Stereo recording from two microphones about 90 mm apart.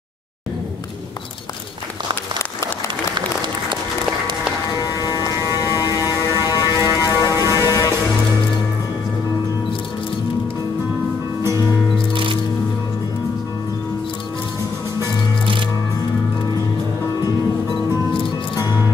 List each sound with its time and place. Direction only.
5.0 s a sound: 50° left (ahead or behind)
7.0 s vehicle: 45° left (ahead or behind)
7.5 s music: 45° left (ahead or behind)
12.1 s music: 70° right (ahead or behind)
18.6 s music: 45° left (ahead or behind)